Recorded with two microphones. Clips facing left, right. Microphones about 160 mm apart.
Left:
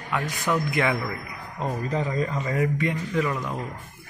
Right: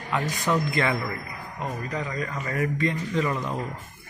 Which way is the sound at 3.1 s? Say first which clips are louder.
Even; centre (ahead or behind).